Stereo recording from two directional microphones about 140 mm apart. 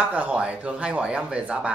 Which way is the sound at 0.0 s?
10° right (ahead or behind).